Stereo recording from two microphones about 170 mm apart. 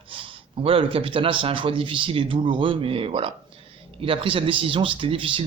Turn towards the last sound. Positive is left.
turn(degrees=-30)  # may be behind; listen again after turning